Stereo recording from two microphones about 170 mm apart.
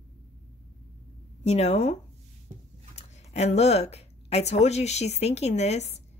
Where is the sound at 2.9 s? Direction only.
40° left (ahead or behind).